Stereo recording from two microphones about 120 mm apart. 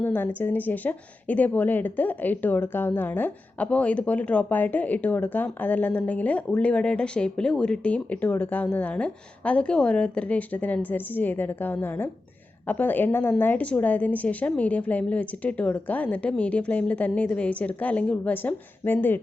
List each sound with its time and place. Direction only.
0.0 s speech: 15° left (ahead or behind)